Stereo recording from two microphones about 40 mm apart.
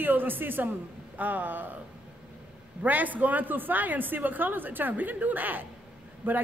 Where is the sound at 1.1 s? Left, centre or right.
Right.